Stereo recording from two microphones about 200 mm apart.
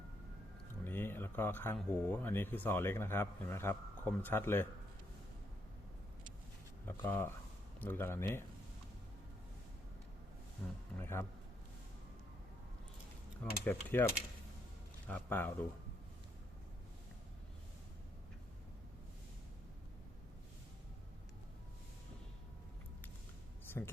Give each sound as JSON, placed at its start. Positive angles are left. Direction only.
{"t": 0.9, "sound": "speech", "side_deg": 10}
{"t": 6.8, "sound": "speech", "side_deg": 10}
{"t": 10.6, "sound": "speech", "side_deg": 5}
{"t": 13.4, "sound": "speech", "side_deg": 10}
{"t": 23.8, "sound": "speech", "side_deg": 10}